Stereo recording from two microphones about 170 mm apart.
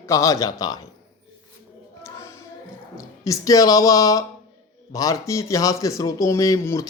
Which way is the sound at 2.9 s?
20° left (ahead or behind).